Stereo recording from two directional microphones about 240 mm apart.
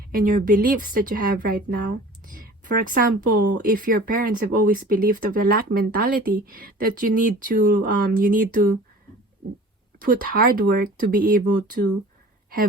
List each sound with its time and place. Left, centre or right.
0.1 s speech: right
10.0 s speech: right